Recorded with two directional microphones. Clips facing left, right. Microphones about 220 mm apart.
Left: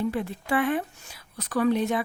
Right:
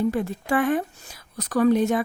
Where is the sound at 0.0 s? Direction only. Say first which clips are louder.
Right 4 dB; 45° right (ahead or behind).